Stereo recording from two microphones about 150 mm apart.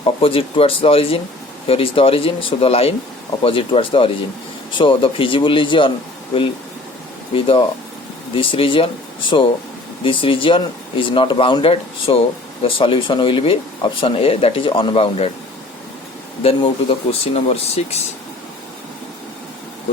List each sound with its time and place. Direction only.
0.0 s speech: 35° left (ahead or behind)
7.3 s speech: 35° left (ahead or behind)
10.0 s speech: 35° left (ahead or behind)
16.4 s speech: 35° left (ahead or behind)